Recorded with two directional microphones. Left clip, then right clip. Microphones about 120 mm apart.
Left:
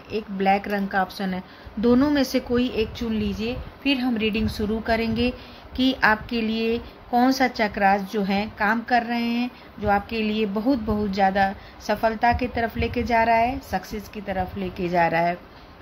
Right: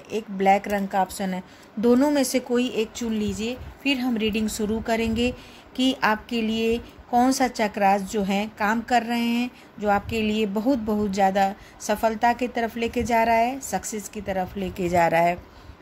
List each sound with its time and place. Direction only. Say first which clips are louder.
0.1 s a woman's voice: right 1 dB; 30° right (ahead or behind)